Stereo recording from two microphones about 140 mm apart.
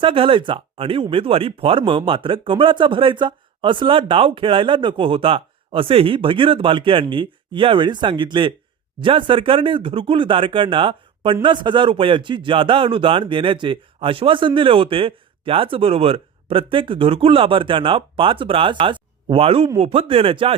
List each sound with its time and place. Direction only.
0.0 s speech: 40° right (ahead or behind)